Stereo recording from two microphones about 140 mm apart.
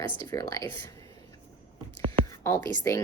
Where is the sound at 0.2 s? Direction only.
25° left (ahead or behind).